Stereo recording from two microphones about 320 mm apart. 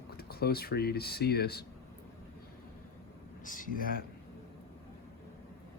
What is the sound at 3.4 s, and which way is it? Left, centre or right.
Speech, left.